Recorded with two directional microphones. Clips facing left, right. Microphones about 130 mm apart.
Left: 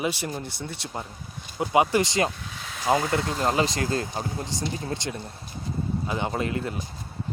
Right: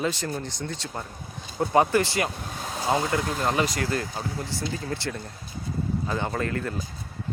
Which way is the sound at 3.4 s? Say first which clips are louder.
Left 1 dB; 25° left (ahead or behind).